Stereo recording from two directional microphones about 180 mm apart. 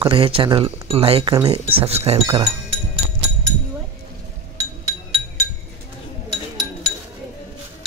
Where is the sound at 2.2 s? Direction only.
20° right (ahead or behind).